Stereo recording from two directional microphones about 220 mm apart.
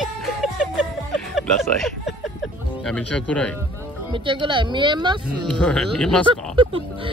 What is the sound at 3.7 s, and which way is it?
Speech, 25° right (ahead or behind).